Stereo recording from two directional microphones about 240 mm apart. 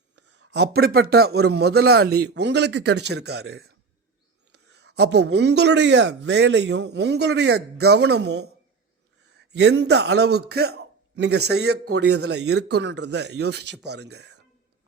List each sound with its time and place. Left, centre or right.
0.2 s speech: right